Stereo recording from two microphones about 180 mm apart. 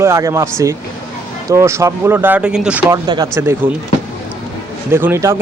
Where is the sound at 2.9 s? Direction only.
20° right (ahead or behind).